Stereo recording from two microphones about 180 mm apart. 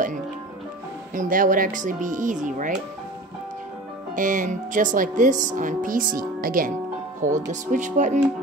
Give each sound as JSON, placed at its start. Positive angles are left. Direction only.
{"t": 1.1, "sound": "speech", "side_deg": -50}
{"t": 4.1, "sound": "speech", "side_deg": -45}